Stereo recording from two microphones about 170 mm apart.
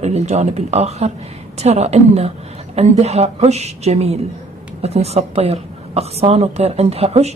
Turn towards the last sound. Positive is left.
turn(degrees=-40)  # may be behind; listen again after turning